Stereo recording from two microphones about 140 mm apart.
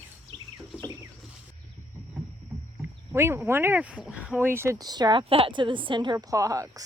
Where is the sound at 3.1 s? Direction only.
20° right (ahead or behind); by 6.1 s 35° right (ahead or behind).